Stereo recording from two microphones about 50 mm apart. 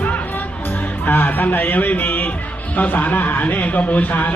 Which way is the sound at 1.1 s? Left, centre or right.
Left.